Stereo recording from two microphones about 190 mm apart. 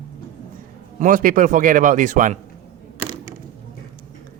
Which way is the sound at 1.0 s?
45° right (ahead or behind).